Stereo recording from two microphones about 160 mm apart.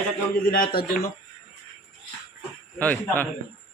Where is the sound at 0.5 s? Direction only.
65° left (ahead or behind).